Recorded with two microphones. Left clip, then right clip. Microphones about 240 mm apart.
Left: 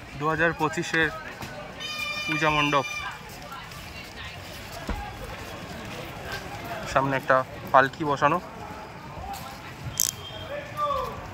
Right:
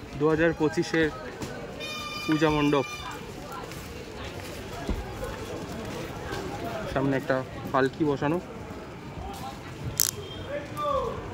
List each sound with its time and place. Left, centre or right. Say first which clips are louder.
0.2 s speech: even; centre
2.2 s speech: even; centre
6.9 s speech: left 5 dB; centre
10.0 s a sound: even; right